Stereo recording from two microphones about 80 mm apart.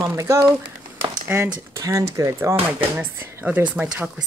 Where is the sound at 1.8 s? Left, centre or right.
Right.